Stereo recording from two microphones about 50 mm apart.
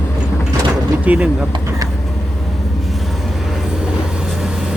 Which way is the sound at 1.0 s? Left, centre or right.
Right.